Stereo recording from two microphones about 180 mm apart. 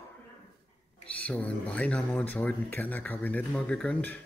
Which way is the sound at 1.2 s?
5° left (ahead or behind).